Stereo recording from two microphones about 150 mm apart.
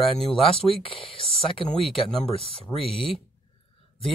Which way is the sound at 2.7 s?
35° left (ahead or behind).